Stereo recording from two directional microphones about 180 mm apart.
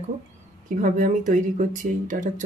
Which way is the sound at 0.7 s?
45° right (ahead or behind).